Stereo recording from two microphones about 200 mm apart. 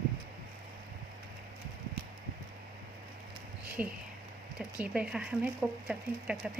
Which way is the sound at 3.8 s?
5° right (ahead or behind).